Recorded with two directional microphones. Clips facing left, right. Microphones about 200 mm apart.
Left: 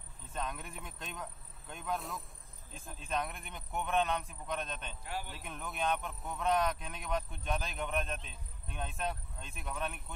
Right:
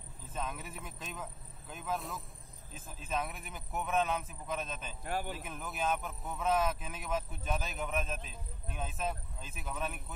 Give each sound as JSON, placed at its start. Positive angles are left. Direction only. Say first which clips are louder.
{"t": 0.2, "sound": "speech", "louder": "even", "side_deg": 0}
{"t": 5.0, "sound": "a man's voice", "louder": "right 6 dB", "side_deg": -50}
{"t": 5.3, "sound": "speech", "louder": "right 2 dB", "side_deg": 0}